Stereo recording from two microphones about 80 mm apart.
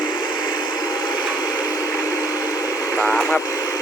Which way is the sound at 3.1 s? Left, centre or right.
Centre.